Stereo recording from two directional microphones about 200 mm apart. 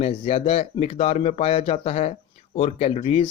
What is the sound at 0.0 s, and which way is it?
Speech, 30° left (ahead or behind).